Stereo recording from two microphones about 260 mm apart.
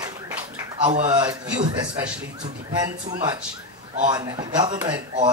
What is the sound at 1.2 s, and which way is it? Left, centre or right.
Speech, centre.